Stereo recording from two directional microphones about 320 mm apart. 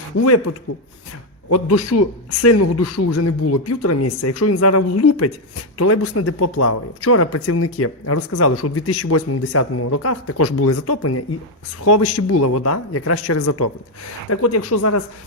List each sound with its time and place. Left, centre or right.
1.5 s a man's voice: left